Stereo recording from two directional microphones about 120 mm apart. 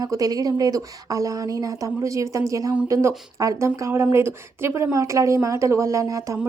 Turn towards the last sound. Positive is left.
turn(degrees=-30)  # may be behind; listen again after turning